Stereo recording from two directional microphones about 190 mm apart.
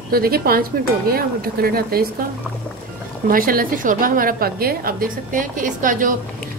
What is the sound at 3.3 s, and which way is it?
A woman's voice, 50° right (ahead or behind).